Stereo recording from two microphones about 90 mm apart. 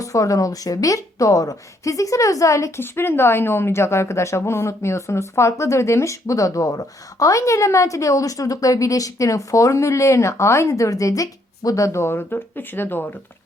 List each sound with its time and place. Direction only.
0.0 s a woman's voice: 40° left (ahead or behind); by 13.1 s 20° left (ahead or behind)